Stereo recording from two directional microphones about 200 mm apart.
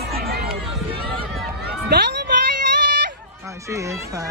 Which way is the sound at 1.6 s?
50° right (ahead or behind).